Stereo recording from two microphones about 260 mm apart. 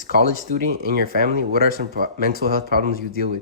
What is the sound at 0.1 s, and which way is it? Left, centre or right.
Speech, right.